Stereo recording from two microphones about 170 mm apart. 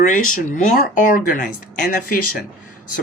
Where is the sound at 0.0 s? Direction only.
50° left (ahead or behind).